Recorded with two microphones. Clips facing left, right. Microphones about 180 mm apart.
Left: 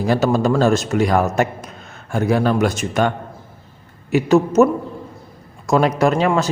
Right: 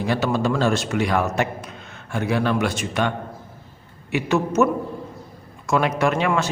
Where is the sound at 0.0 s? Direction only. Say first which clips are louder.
Left 5 dB; 40° left (ahead or behind).